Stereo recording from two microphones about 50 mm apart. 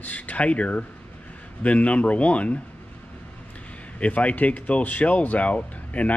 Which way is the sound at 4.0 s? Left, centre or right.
Left.